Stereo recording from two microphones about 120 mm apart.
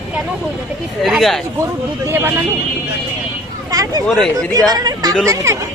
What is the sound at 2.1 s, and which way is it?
Speech, 20° right (ahead or behind).